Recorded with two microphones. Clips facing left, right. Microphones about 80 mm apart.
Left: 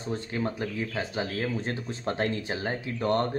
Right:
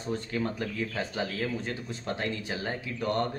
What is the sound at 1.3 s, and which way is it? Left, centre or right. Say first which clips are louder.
Speech: left 2 dB; left.